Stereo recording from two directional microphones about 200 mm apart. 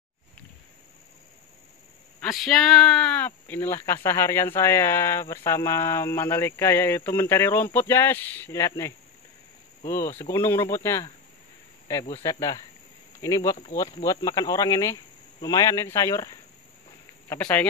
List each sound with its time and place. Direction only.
2.1 s speech: centre (ahead or behind)